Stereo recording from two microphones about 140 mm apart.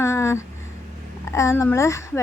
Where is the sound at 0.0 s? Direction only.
20° left (ahead or behind).